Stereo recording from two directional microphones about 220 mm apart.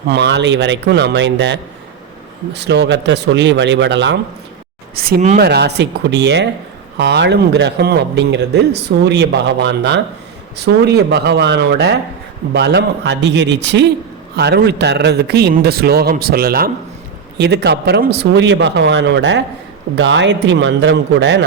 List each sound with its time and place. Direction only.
0.1 s speech: 50° right (ahead or behind)
5.4 s speech: 50° right (ahead or behind)